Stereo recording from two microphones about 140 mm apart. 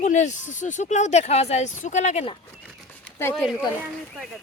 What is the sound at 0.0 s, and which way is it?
Speech, 60° left (ahead or behind).